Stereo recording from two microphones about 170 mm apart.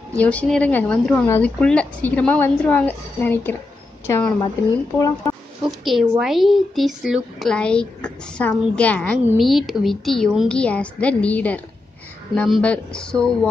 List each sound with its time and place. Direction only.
0.2 s speech: 10° left (ahead or behind)
5.6 s speech: 5° right (ahead or behind)